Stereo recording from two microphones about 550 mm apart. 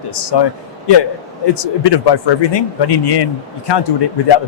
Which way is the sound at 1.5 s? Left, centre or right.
Left.